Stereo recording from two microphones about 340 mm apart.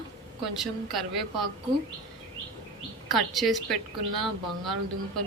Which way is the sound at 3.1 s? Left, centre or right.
Centre.